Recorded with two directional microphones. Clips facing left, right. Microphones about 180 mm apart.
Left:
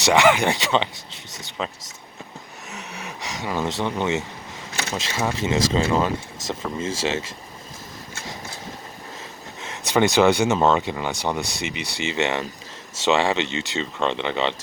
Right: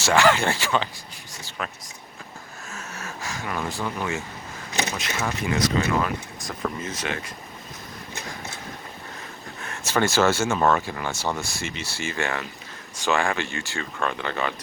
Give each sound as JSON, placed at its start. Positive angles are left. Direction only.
{"t": 0.0, "sound": "speech", "side_deg": 15}
{"t": 2.6, "sound": "a sound", "side_deg": 15}
{"t": 3.8, "sound": "speech", "side_deg": 25}
{"t": 9.6, "sound": "speech", "side_deg": 20}